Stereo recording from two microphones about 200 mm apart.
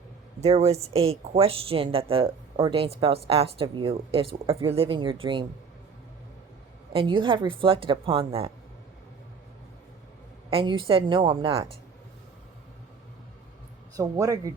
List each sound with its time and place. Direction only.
0.3 s a woman's voice: 30° right (ahead or behind)
6.9 s a woman's voice: 25° right (ahead or behind)
10.5 s a woman's voice: 25° right (ahead or behind)
13.9 s a man's voice: 15° right (ahead or behind)